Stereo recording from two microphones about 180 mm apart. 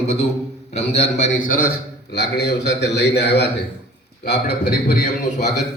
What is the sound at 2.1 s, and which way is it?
A man's voice, 65° left (ahead or behind).